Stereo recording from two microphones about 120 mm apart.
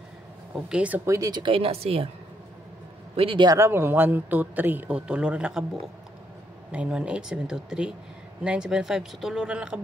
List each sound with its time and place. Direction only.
0.7 s a man's voice: 10° right (ahead or behind)
1.0 s speech: 25° right (ahead or behind)
1.3 s speech: 45° right (ahead or behind)
3.2 s speech: 50° right (ahead or behind)
3.4 s a man's voice: 25° right (ahead or behind); by 5.7 s 5° right (ahead or behind)
6.7 s a man's voice: 10° right (ahead or behind)